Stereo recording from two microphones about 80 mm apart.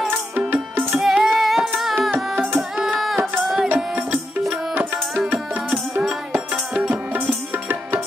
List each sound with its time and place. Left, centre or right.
0.1 s music: right
0.9 s female singing: centre
2.3 s tabla: right
2.8 s tabla: centre
3.3 s music: centre
3.7 s music: right
6.3 s music: centre
7.5 s tabla: right